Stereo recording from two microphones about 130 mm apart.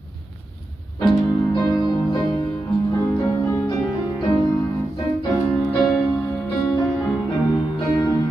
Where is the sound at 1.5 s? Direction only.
35° left (ahead or behind).